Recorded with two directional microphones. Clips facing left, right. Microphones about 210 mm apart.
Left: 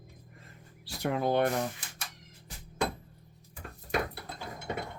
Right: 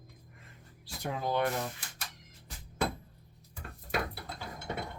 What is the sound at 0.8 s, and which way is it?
Speech, 65° left (ahead or behind).